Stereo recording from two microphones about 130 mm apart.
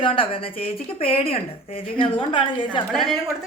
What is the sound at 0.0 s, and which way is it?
Speech, 45° left (ahead or behind).